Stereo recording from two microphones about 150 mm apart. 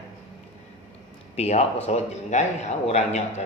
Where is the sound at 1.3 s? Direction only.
45° left (ahead or behind).